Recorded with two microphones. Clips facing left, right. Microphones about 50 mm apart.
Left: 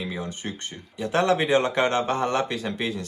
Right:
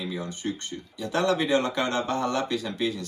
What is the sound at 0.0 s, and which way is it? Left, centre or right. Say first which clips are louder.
Speech: even; left.